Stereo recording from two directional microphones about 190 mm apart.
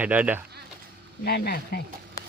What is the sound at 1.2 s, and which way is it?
Speech, 55° left (ahead or behind).